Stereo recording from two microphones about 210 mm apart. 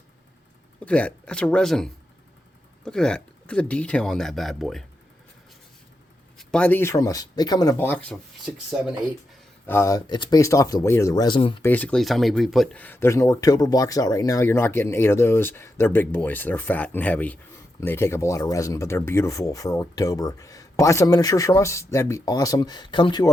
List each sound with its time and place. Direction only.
0.8 s speech: 5° left (ahead or behind)
6.3 s speech: 5° left (ahead or behind)
9.6 s speech: 15° left (ahead or behind)
11.6 s speech: 10° left (ahead or behind)